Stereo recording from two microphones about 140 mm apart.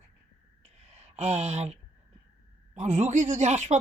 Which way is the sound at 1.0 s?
50° right (ahead or behind).